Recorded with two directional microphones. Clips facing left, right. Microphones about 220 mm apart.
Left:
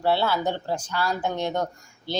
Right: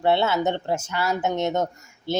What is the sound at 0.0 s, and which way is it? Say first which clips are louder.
Speech: right 2 dB; 20° right (ahead or behind).